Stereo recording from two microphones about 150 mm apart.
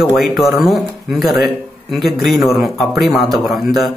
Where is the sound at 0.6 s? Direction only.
Centre (ahead or behind).